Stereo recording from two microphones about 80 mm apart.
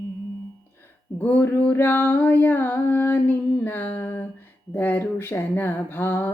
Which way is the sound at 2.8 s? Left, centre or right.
Left.